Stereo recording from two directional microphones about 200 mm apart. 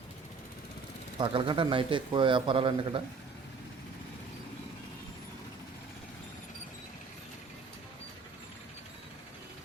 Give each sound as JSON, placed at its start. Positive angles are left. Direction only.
{"t": 1.2, "sound": "a man's voice", "side_deg": -25}